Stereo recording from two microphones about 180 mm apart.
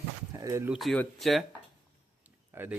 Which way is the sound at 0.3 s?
15° right (ahead or behind).